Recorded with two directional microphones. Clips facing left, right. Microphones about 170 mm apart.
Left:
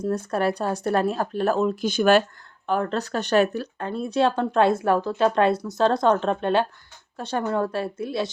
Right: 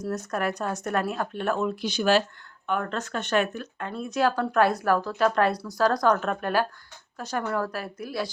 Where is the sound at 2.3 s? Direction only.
35° left (ahead or behind).